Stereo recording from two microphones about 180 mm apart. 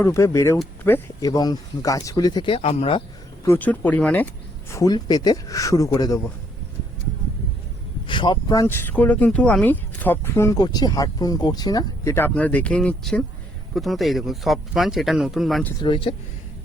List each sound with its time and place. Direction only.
0.0 s speech: 15° left (ahead or behind); by 3.0 s 35° left (ahead or behind)
3.4 s speech: 10° left (ahead or behind)
4.7 s speech: 20° left (ahead or behind)
8.0 s speech: 25° left (ahead or behind); by 15.7 s centre (ahead or behind)
15.8 s speech: 30° left (ahead or behind)